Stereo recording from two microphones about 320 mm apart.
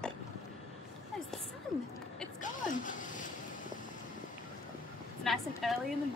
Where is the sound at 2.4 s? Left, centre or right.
Left.